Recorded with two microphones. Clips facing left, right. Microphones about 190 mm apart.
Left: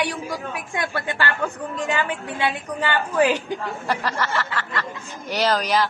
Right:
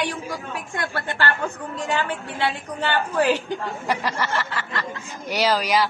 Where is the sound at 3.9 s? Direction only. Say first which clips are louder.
Even; 15° right (ahead or behind).